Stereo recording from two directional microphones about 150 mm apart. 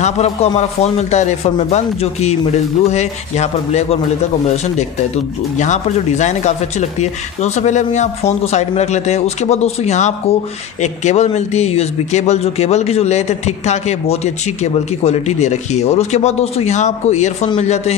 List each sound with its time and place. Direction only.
0.0 s a man's voice: 45° left (ahead or behind)